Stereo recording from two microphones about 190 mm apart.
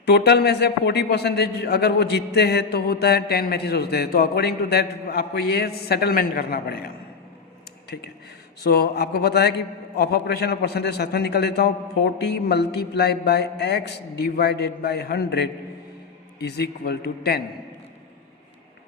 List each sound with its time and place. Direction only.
0.0 s a man's voice: 60° left (ahead or behind)
8.6 s a man's voice: 55° left (ahead or behind)